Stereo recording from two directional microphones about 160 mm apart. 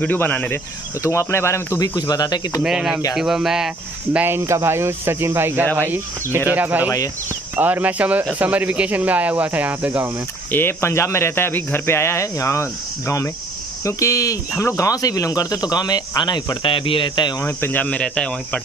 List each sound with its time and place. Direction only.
0.0 s speech: 10° left (ahead or behind)
2.6 s speech: 5° right (ahead or behind)
10.5 s speech: 15° left (ahead or behind)